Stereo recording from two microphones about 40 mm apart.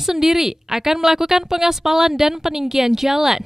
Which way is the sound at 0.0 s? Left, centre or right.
Centre.